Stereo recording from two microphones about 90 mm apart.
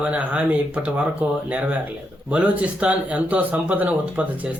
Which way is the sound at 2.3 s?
15° right (ahead or behind).